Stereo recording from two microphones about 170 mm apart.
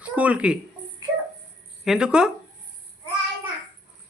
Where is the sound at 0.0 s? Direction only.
10° right (ahead or behind).